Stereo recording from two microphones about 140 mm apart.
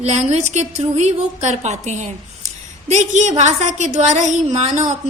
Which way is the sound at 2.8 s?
55° right (ahead or behind).